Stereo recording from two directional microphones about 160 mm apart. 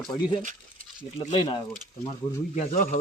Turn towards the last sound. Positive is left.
turn(degrees=50)  # may be behind; listen again after turning